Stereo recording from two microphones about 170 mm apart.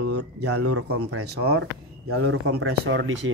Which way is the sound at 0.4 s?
75° right (ahead or behind).